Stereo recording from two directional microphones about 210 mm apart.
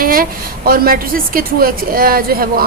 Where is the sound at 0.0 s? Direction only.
45° right (ahead or behind).